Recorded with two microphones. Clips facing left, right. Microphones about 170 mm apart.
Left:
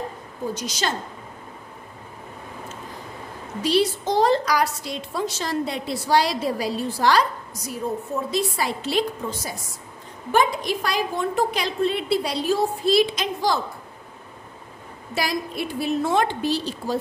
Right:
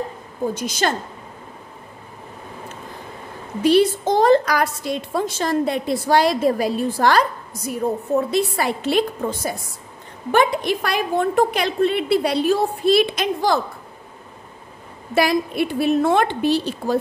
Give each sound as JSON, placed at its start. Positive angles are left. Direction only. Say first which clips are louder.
{"t": 0.6, "sound": "a woman's voice", "louder": "right 5 dB", "side_deg": -55}
{"t": 3.6, "sound": "a woman's voice", "louder": "right 6 dB", "side_deg": -55}
{"t": 15.1, "sound": "a woman's voice", "louder": "right 8 dB", "side_deg": -60}